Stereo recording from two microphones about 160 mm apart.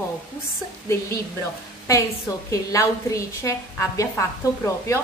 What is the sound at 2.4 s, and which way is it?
A woman's voice, 20° left (ahead or behind).